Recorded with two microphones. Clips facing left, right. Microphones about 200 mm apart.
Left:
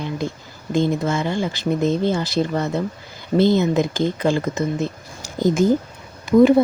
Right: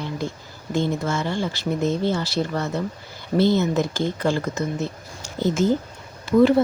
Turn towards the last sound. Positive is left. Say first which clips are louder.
# left 3 dB
turn(degrees=15)  # may be behind; listen again after turning